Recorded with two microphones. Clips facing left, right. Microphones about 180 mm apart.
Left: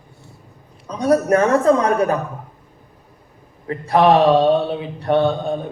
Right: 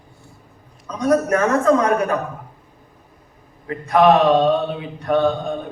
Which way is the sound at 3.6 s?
35° left (ahead or behind).